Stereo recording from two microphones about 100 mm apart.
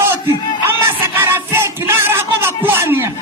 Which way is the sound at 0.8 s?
25° right (ahead or behind).